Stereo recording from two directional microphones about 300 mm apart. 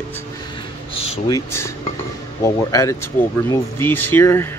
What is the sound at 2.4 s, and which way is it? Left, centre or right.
Speech, centre.